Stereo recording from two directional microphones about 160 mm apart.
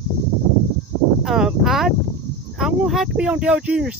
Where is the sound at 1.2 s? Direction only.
Centre (ahead or behind).